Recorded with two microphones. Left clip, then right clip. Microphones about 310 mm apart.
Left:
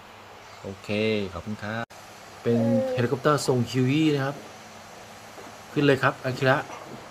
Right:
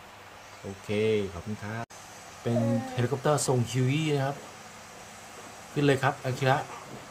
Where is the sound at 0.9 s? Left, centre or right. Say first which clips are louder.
Left 1 dB; centre.